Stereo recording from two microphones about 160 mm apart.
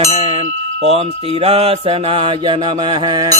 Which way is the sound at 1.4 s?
40° right (ahead or behind).